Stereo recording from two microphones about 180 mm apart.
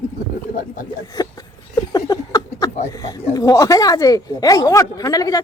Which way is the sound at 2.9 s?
20° left (ahead or behind).